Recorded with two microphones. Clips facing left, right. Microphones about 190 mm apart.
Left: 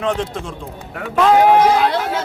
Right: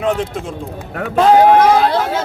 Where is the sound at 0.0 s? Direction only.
5° right (ahead or behind).